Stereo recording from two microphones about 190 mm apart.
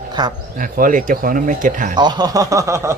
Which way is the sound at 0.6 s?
45° right (ahead or behind).